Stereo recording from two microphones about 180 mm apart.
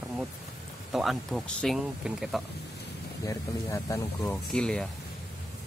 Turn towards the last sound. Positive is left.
turn(degrees=5)  # may be behind; listen again after turning